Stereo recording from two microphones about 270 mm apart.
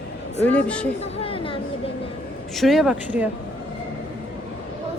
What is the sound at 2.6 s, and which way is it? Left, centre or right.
Speech, centre.